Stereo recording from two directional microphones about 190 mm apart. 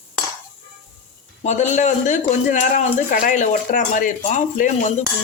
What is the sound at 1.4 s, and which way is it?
Speech, 40° left (ahead or behind).